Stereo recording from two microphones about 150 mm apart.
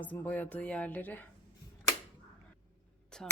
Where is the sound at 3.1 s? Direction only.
5° left (ahead or behind).